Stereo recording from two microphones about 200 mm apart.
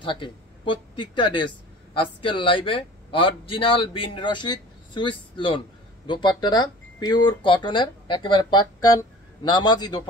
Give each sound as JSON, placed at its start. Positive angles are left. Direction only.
{"t": 0.0, "sound": "speech", "side_deg": 25}